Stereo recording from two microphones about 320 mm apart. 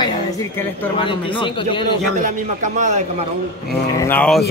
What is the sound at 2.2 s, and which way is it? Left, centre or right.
Speech, right.